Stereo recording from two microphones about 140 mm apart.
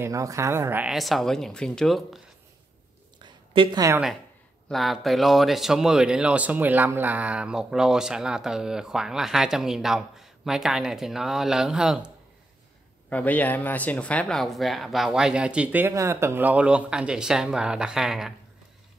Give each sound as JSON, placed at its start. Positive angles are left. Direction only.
{"t": 0.0, "sound": "speech", "side_deg": -25}
{"t": 0.9, "sound": "speech", "side_deg": 0}
{"t": 3.2, "sound": "a sound", "side_deg": -35}
{"t": 4.6, "sound": "speech", "side_deg": 0}
{"t": 13.1, "sound": "speech", "side_deg": 10}